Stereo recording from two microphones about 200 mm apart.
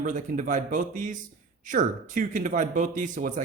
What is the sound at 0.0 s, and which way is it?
Speech, 40° right (ahead or behind).